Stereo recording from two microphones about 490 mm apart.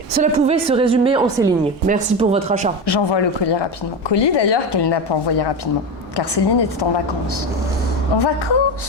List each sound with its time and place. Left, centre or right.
0.2 s a woman's voice: centre
2.8 s a woman's voice: left
8.2 s speech: left